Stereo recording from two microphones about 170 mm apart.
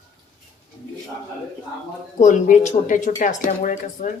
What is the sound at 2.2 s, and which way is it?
Speech, 45° left (ahead or behind).